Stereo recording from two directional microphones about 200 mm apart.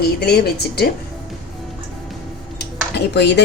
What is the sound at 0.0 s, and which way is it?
Speech, 55° left (ahead or behind).